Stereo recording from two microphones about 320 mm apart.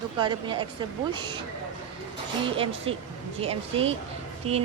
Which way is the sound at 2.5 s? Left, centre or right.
Centre.